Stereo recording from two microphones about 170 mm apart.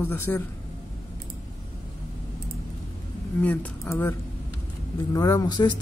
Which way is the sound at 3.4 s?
10° left (ahead or behind).